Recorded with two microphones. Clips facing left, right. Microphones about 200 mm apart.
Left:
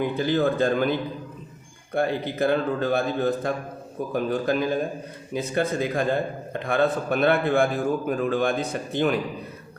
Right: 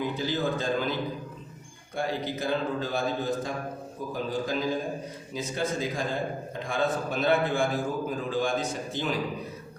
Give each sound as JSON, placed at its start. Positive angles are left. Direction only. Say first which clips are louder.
{"t": 0.0, "sound": "a man's voice", "louder": "left 6 dB", "side_deg": 60}